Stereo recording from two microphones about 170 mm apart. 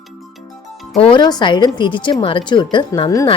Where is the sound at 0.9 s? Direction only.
30° left (ahead or behind).